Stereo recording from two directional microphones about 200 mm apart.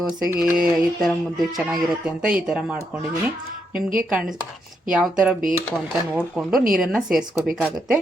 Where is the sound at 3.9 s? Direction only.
5° right (ahead or behind).